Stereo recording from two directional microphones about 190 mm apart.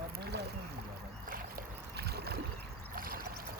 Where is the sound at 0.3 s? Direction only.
60° right (ahead or behind).